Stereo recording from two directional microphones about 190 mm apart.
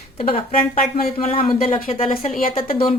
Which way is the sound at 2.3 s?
45° left (ahead or behind).